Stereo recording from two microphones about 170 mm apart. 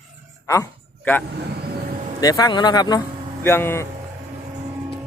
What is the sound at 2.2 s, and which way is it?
Speech, 20° left (ahead or behind).